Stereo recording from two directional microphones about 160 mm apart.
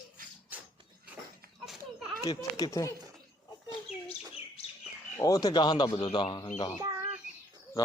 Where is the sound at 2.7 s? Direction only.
20° left (ahead or behind).